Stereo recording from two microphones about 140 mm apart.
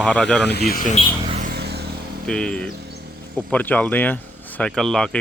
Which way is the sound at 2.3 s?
5° left (ahead or behind).